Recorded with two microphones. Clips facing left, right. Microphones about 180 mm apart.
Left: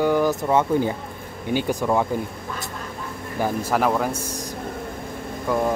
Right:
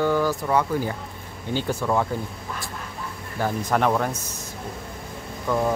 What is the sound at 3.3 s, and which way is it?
Speech, 15° left (ahead or behind).